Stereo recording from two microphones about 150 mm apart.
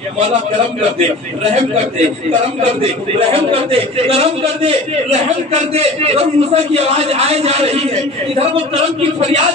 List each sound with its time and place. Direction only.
0.9 s a man's voice: 50° right (ahead or behind)
3.2 s a man's voice: 40° right (ahead or behind)